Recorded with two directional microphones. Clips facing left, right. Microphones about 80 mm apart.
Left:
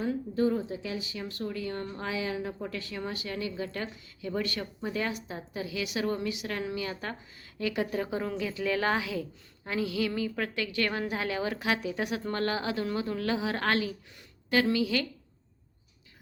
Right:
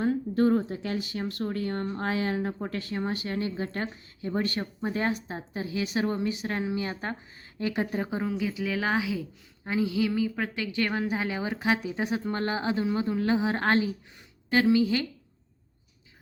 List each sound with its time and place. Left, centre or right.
0.0 s speech: right
8.2 s a woman's voice: centre